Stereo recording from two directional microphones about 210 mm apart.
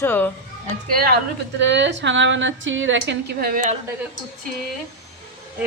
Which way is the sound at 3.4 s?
40° right (ahead or behind).